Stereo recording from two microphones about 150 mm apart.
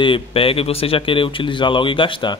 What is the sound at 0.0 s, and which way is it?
Speech, 35° left (ahead or behind).